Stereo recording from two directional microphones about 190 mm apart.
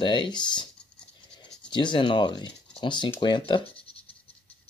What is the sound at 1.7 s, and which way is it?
Speech, 25° left (ahead or behind).